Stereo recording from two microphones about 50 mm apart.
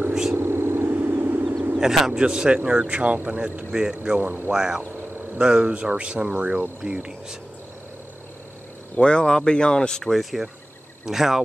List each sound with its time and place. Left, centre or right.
0.3 s vehicle: right
1.8 s speech: centre
8.9 s speech: centre
10.1 s speech: centre